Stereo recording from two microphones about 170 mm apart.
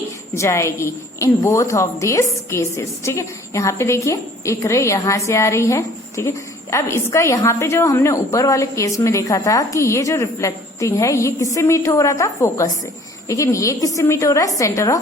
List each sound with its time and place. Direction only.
0.3 s a woman's voice: 15° left (ahead or behind)